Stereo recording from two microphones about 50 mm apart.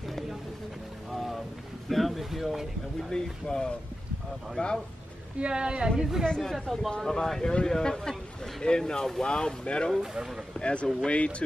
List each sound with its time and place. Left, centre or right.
0.0 s a sound: centre
1.1 s music: centre
1.9 s speech: centre
3.0 s a man's voice: centre
5.4 s speech: centre
6.2 s a man's voice: centre
9.9 s speech: centre
10.6 s speech: left